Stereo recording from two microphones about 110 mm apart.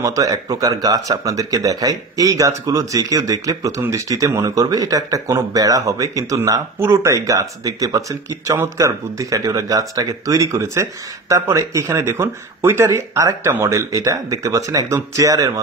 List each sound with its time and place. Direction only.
0.0 s speech: 30° right (ahead or behind)